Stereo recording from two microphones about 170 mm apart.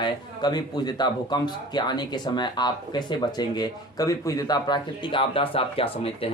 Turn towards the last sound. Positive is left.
turn(degrees=35)  # may be behind; listen again after turning